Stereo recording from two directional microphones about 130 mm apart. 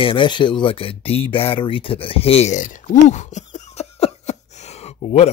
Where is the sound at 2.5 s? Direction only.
75° left (ahead or behind).